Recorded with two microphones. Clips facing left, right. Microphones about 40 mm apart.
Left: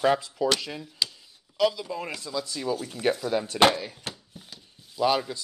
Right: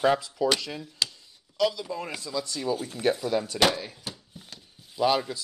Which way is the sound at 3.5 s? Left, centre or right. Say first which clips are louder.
Left 6 dB; left.